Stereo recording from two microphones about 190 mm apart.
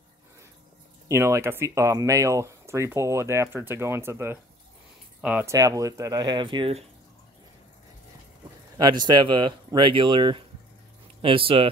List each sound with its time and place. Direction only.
1.0 s speech: 15° right (ahead or behind); by 6.9 s 30° right (ahead or behind)
9.0 s speech: 25° right (ahead or behind)